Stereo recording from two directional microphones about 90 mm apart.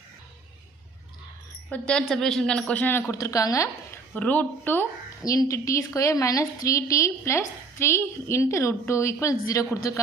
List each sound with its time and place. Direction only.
1.7 s a woman's voice: 10° left (ahead or behind)
3.1 s a woman's voice: 35° left (ahead or behind)
4.1 s speech: 15° left (ahead or behind)
5.2 s a woman's voice: 40° left (ahead or behind)